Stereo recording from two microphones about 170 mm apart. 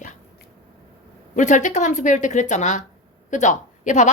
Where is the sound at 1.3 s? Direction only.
45° left (ahead or behind).